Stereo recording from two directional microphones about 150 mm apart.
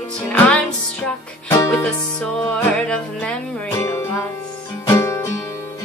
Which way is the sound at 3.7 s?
15° left (ahead or behind).